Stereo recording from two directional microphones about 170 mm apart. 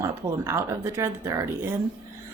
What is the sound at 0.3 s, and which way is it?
Speech, 15° right (ahead or behind).